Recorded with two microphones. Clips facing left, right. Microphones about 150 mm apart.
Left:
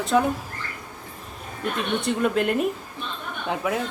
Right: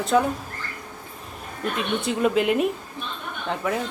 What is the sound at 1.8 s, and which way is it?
Speech, centre (ahead or behind).